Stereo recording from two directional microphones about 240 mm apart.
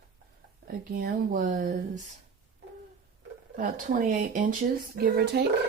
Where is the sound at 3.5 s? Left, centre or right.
Right.